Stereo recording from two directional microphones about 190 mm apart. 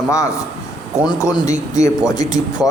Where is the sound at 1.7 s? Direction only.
15° left (ahead or behind).